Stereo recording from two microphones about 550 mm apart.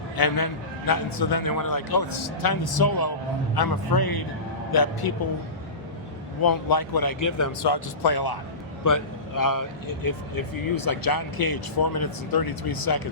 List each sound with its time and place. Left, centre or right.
0.2 s speech: left
6.4 s speech: left